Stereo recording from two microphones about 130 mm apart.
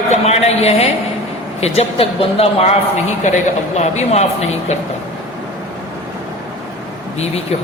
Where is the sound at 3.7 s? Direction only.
60° left (ahead or behind).